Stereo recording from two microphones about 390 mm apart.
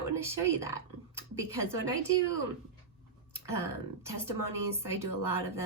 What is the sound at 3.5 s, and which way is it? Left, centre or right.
Speech, centre.